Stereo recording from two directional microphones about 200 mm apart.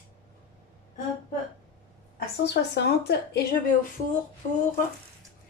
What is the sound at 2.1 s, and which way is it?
A woman's voice, 60° left (ahead or behind).